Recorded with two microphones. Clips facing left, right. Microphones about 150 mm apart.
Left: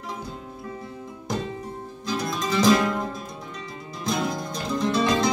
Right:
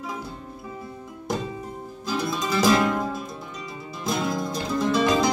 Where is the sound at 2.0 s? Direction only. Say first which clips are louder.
Right 1 dB; 5° right (ahead or behind).